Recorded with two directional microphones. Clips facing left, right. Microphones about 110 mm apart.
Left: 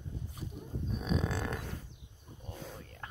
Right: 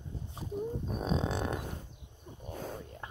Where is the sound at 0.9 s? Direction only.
35° right (ahead or behind).